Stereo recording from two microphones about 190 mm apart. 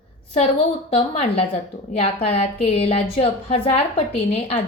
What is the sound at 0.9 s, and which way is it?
A woman's voice, 30° left (ahead or behind).